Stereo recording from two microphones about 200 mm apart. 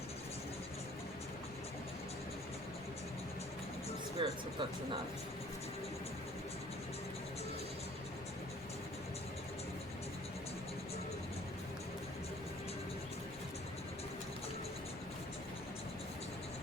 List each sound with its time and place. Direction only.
4.2 s music: 25° right (ahead or behind)